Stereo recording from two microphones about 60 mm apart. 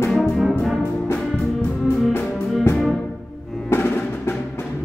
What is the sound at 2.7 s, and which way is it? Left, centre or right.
Music, left.